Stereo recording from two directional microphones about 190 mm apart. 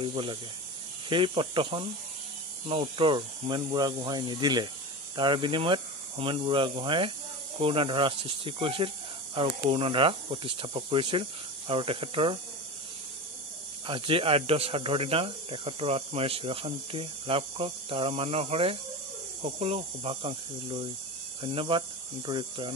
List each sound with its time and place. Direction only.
0.0 s speech: 25° right (ahead or behind)
13.8 s speech: 25° right (ahead or behind)